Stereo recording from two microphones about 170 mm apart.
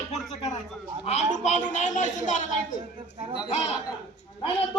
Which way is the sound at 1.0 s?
45° left (ahead or behind).